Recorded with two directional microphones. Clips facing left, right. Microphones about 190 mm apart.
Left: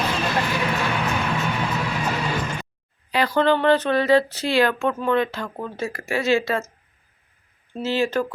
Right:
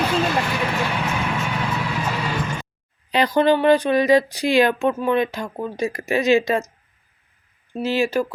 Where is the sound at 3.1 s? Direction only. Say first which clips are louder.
Right 2 dB; 15° right (ahead or behind).